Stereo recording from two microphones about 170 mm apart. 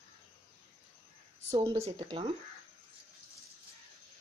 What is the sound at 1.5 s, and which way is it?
Speech, 30° right (ahead or behind).